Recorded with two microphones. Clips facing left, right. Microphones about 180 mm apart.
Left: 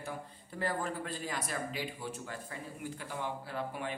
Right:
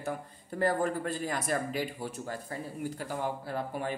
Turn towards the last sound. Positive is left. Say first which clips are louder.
# right 4 dB
turn(degrees=-45)  # may be behind; listen again after turning